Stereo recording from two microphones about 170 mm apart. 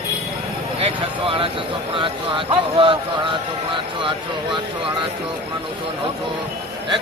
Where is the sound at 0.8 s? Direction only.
35° right (ahead or behind).